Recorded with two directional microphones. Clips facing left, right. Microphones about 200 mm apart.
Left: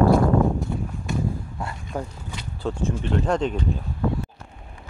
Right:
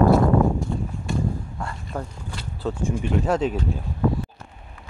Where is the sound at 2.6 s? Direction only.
10° right (ahead or behind).